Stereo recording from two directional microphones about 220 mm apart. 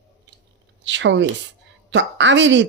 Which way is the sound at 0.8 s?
55° right (ahead or behind).